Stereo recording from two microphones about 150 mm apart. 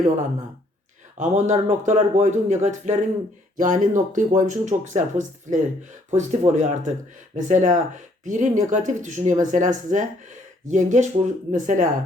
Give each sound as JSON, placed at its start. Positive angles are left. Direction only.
{"t": 1.2, "sound": "speech", "side_deg": -55}